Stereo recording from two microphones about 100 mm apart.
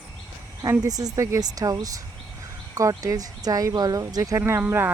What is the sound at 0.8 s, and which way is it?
Speech, 35° right (ahead or behind).